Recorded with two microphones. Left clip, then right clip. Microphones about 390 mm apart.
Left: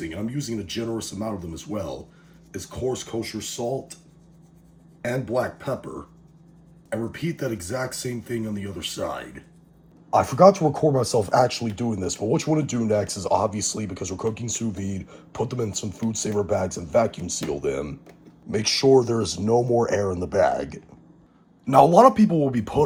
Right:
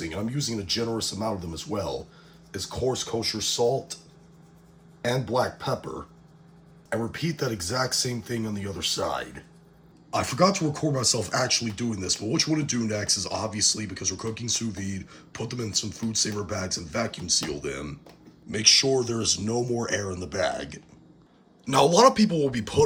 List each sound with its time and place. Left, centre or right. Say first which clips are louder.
0.0 s speech: even; centre
5.0 s speech: even; centre
6.9 s speech: even; centre
10.1 s speech: left 8 dB; centre
18.8 s speech: left 6 dB; left
19.2 s speech: left 5 dB; centre